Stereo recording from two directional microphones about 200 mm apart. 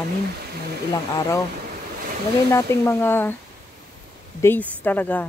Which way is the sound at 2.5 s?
10° left (ahead or behind).